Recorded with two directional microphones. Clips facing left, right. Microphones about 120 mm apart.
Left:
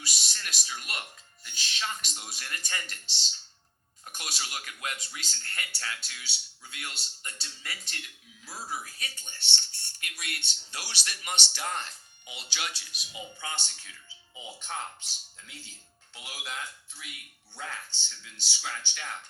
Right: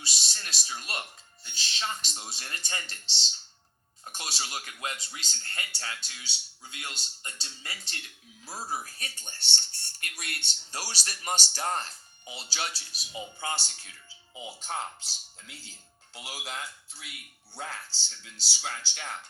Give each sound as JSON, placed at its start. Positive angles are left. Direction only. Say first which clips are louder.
{"t": 0.0, "sound": "speech", "louder": "left 1 dB", "side_deg": -30}